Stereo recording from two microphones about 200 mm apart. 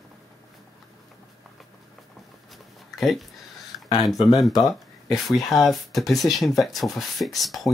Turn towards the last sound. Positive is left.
turn(degrees=0)  # may be behind; listen again after turning